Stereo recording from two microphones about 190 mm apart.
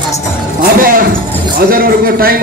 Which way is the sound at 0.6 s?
45° right (ahead or behind).